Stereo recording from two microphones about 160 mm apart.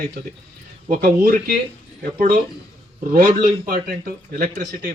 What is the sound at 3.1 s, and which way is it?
Speech, 60° right (ahead or behind).